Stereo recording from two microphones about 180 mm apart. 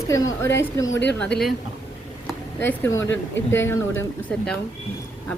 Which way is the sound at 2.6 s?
10° left (ahead or behind).